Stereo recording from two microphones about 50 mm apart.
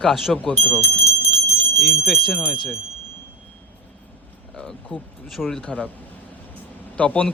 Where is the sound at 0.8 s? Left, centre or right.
Left.